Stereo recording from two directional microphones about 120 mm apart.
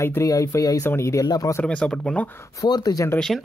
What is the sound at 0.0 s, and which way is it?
Speech, 25° left (ahead or behind).